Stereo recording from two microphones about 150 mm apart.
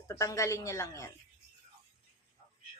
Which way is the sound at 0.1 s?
20° left (ahead or behind).